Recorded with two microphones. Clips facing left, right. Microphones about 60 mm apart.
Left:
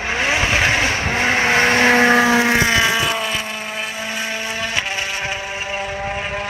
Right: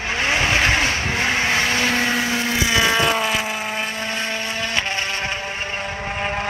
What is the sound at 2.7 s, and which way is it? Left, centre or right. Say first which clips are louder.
Vehicle: even; centre.